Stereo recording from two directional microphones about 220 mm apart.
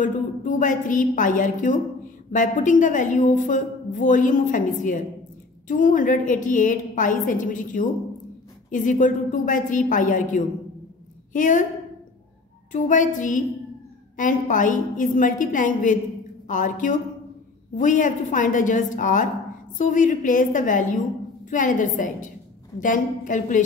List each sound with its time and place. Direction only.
0.0 s a woman's voice: 35° left (ahead or behind)
12.7 s a woman's voice: 35° left (ahead or behind)